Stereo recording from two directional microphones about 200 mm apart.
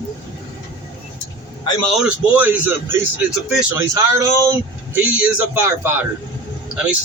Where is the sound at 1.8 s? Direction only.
5° right (ahead or behind).